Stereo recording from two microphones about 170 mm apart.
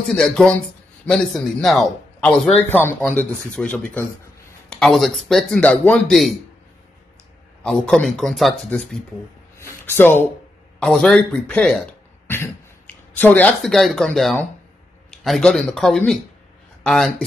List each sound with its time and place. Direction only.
0.1 s a man's voice: 5° left (ahead or behind)
7.6 s a man's voice: 5° left (ahead or behind)
9.6 s a man's voice: 15° left (ahead or behind)
12.3 s cough: 15° left (ahead or behind)
13.2 s a man's voice: 10° left (ahead or behind)